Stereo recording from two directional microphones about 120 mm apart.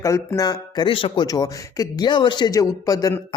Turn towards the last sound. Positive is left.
turn(degrees=30)  # may be behind; listen again after turning